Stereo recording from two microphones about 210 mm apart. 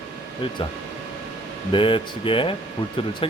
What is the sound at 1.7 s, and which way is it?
Speech, 25° left (ahead or behind).